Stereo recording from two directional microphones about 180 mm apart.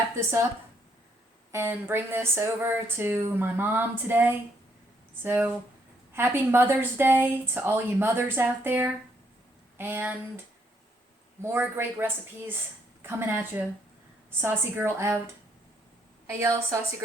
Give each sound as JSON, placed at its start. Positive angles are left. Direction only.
{"t": 1.5, "sound": "speech", "side_deg": -10}
{"t": 11.4, "sound": "speech", "side_deg": -10}
{"t": 16.2, "sound": "a woman's voice", "side_deg": -15}